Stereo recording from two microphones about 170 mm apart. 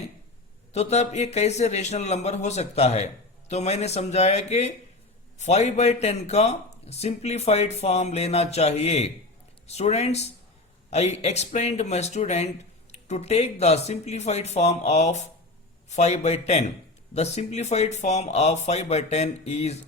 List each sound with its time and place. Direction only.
0.7 s speech: 40° left (ahead or behind)